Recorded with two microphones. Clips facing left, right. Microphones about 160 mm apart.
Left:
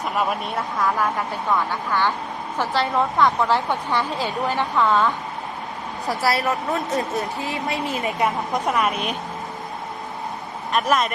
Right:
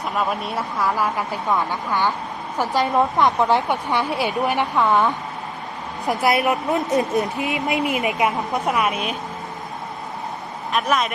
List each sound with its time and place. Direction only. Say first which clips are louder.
0.2 s a woman's voice: right 1 dB; centre (ahead or behind)
10.7 s speech: left 1 dB; centre (ahead or behind)